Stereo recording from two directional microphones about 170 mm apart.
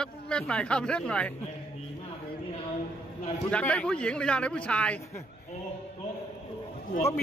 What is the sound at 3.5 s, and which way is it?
Speech, 10° left (ahead or behind).